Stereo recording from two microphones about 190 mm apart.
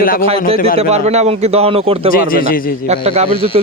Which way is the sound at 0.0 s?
50° left (ahead or behind).